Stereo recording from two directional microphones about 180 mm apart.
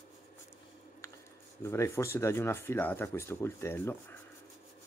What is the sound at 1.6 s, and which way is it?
Speech, 15° left (ahead or behind).